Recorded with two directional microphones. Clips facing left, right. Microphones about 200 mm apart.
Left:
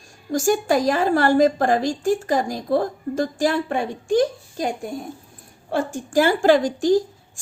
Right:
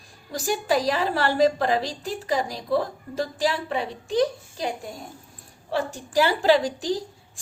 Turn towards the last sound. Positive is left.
turn(degrees=50)  # may be behind; listen again after turning